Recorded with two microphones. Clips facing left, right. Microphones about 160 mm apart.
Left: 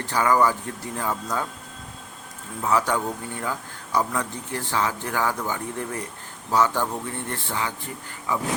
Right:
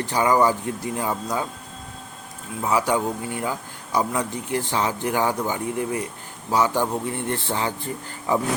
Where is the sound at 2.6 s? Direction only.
10° right (ahead or behind).